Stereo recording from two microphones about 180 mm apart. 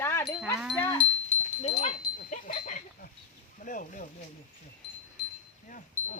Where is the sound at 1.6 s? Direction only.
45° left (ahead or behind).